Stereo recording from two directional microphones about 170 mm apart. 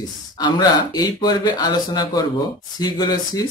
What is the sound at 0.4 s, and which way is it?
Speech, 20° left (ahead or behind).